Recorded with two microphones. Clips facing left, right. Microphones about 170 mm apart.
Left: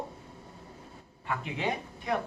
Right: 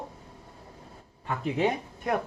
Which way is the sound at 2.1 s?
50° right (ahead or behind).